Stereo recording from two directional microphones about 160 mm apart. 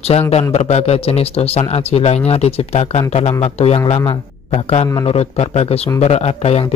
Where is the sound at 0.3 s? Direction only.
40° left (ahead or behind).